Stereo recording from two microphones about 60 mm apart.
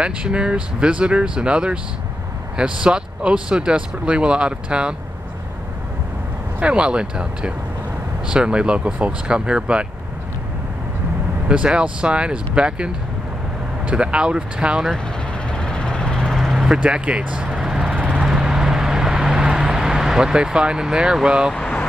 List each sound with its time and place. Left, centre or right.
0.0 s speech: centre
6.6 s speech: centre
11.4 s speech: centre
15.5 s vehicle: centre
16.8 s vehicle: centre